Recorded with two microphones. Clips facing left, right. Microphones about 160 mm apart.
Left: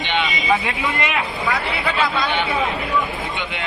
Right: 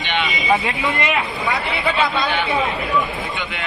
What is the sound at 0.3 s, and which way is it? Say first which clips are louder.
Vehicle: right 2 dB; 20° right (ahead or behind).